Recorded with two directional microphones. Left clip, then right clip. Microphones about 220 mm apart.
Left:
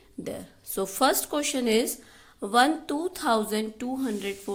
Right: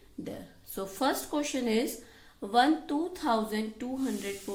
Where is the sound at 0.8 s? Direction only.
35° left (ahead or behind).